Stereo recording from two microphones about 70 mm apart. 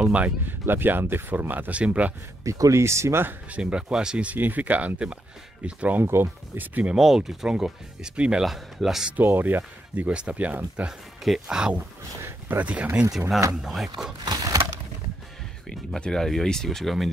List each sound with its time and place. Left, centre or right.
0.0 s speech: centre
0.5 s speech: right
2.4 s speech: right
3.5 s speech: centre
7.0 s speech: centre
9.1 s speech: right
9.9 s speech: centre
10.9 s speech: centre
13.6 s speech: centre
14.2 s a sound: right
15.7 s speech: centre